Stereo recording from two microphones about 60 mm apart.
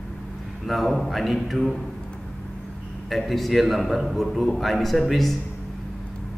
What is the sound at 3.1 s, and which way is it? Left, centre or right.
A man's voice, centre.